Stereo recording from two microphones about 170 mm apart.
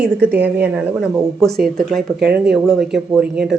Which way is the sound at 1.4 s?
Centre (ahead or behind).